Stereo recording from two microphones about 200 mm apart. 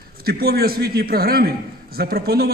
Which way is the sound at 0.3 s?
50° right (ahead or behind).